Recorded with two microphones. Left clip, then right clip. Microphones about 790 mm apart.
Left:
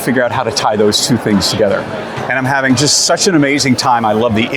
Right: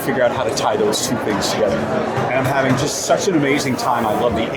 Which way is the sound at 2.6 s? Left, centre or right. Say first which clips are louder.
Left 6 dB; left.